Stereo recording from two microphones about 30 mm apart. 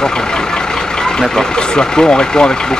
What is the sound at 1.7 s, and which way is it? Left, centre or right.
Speech, left.